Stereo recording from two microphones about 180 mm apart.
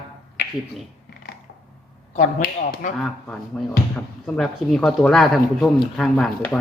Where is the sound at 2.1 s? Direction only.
55° left (ahead or behind).